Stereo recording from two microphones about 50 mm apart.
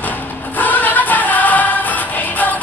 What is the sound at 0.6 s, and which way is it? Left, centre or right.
Music, left.